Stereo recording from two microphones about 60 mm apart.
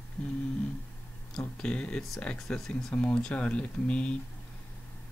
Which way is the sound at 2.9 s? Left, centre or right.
Centre.